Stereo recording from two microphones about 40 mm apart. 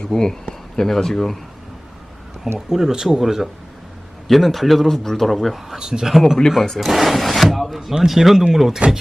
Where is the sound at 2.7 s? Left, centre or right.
Centre.